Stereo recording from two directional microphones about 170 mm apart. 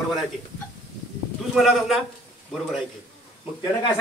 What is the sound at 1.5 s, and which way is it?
Speech, centre (ahead or behind).